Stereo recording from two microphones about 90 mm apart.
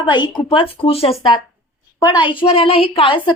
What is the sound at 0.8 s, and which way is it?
Speech, 90° left.